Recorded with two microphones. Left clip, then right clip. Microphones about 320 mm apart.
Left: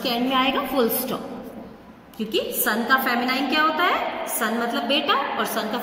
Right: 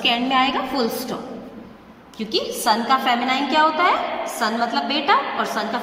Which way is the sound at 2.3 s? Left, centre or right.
Right.